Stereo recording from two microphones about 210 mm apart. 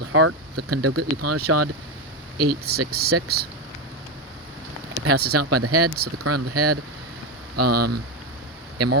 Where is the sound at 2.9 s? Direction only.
50° right (ahead or behind).